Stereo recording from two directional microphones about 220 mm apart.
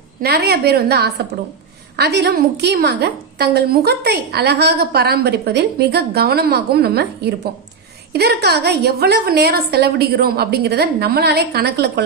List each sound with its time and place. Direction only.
0.2 s a woman's voice: 45° right (ahead or behind)